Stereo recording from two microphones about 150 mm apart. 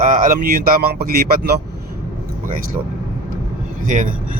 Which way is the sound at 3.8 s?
55° right (ahead or behind).